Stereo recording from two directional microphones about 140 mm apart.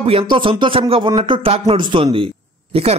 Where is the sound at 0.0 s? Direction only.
40° right (ahead or behind).